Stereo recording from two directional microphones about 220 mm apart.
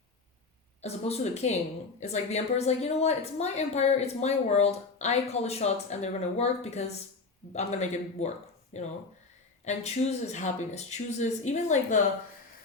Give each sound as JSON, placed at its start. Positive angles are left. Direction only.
{"t": 0.8, "sound": "a woman's voice", "side_deg": 30}